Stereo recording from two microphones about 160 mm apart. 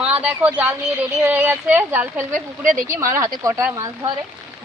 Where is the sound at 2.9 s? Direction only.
15° right (ahead or behind).